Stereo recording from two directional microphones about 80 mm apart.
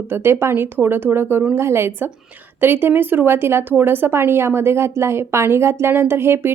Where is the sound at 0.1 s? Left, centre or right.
Right.